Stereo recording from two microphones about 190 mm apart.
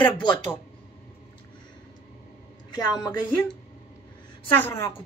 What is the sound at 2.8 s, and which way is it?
Speech, 20° left (ahead or behind).